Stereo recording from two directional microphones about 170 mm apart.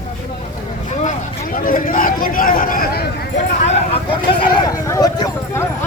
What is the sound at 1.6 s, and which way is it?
Speech, 55° left (ahead or behind).